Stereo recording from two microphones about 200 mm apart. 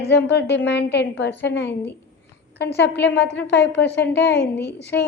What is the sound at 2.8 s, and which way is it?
A woman's voice, 60° left (ahead or behind).